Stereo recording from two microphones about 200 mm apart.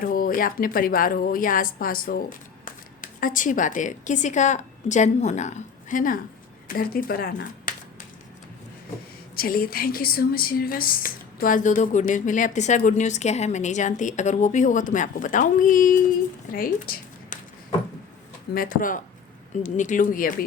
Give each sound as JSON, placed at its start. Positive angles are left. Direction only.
{"t": 0.0, "sound": "a woman's voice", "side_deg": 45}
{"t": 9.3, "sound": "a woman's voice", "side_deg": 45}
{"t": 18.5, "sound": "a woman's voice", "side_deg": 45}